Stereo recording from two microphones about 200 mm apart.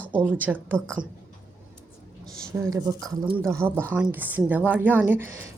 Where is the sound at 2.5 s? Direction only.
15° right (ahead or behind).